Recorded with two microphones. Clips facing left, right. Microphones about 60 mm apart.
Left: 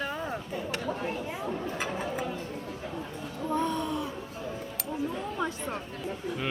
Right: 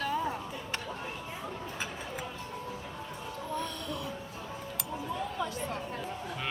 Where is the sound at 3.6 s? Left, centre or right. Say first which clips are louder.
Left 7 dB; left.